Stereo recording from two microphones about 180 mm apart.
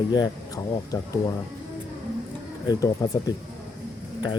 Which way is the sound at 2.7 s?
20° left (ahead or behind).